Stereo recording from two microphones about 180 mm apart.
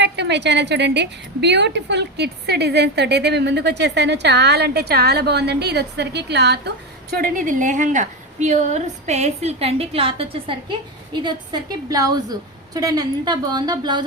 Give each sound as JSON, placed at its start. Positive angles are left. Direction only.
{"t": 0.0, "sound": "a woman's voice", "side_deg": -75}